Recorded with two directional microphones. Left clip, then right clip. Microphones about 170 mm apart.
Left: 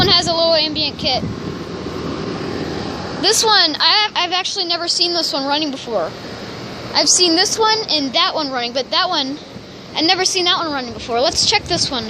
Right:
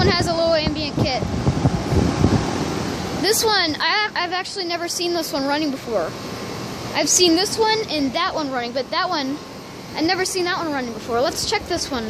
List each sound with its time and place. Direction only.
0.0 s speech: centre (ahead or behind)
3.2 s a woman's voice: 10° right (ahead or behind)
6.9 s a woman's voice: 15° right (ahead or behind)
7.3 s a woman's voice: centre (ahead or behind)
7.7 s a woman's voice: 10° right (ahead or behind)
8.1 s a woman's voice: centre (ahead or behind)